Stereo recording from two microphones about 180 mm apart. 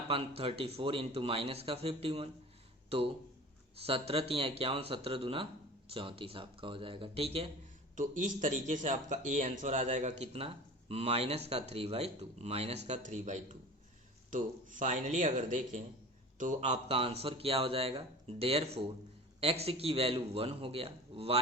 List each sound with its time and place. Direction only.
0.1 s speech: 30° right (ahead or behind)
3.8 s a man's voice: 30° right (ahead or behind)
7.9 s speech: 45° right (ahead or behind)
16.7 s speech: 35° right (ahead or behind)